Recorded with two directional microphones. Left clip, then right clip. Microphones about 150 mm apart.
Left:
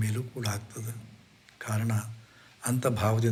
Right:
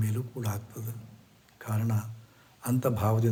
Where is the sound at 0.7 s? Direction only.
10° right (ahead or behind).